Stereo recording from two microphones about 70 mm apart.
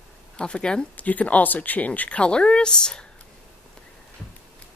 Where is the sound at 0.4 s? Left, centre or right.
Centre.